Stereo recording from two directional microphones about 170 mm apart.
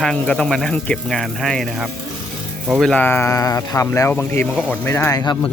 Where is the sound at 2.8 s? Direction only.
5° left (ahead or behind).